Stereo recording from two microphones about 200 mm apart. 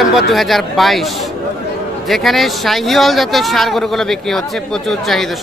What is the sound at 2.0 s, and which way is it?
Speech, centre (ahead or behind).